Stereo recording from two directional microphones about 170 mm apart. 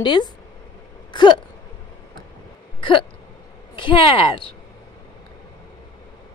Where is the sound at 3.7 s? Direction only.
30° left (ahead or behind).